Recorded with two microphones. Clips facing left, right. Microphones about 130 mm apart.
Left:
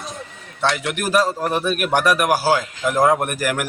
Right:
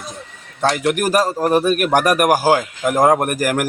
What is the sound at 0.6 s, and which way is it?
A man's voice, 40° right (ahead or behind).